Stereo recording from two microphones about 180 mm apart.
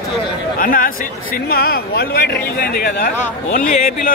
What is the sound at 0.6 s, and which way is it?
A man's voice, 50° left (ahead or behind).